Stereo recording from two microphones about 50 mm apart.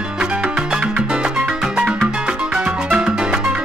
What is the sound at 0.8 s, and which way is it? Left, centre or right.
Music, right.